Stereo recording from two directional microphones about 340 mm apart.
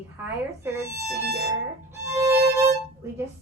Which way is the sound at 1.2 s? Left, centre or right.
Right.